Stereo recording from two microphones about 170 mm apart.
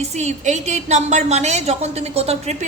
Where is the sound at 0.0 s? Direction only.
40° right (ahead or behind).